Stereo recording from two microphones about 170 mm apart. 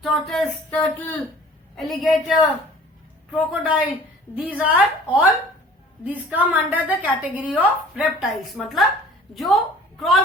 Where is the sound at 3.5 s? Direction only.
5° right (ahead or behind).